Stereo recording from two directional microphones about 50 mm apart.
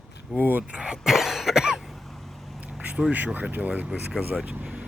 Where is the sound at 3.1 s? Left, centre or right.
Right.